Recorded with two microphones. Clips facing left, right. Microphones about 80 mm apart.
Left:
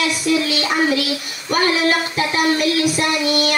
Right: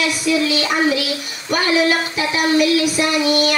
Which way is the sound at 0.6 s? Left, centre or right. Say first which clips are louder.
Even; left.